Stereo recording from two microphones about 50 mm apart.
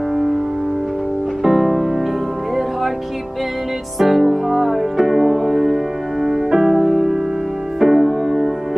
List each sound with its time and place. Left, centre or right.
1.4 s music: centre
4.0 s music: centre